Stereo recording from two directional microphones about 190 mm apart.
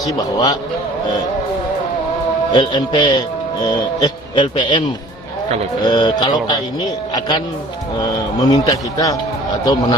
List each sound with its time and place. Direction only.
0.0 s speech: 20° left (ahead or behind)
2.5 s speech: 25° left (ahead or behind)
5.9 s speech: 20° left (ahead or behind)